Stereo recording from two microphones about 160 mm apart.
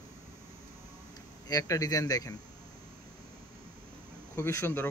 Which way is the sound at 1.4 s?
20° left (ahead or behind).